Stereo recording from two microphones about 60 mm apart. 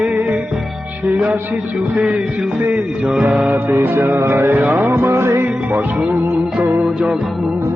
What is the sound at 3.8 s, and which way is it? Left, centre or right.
Speech, right.